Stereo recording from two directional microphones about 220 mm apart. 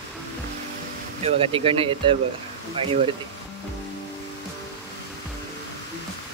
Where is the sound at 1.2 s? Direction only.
25° right (ahead or behind).